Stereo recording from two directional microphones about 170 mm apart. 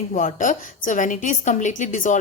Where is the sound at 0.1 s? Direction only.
50° left (ahead or behind).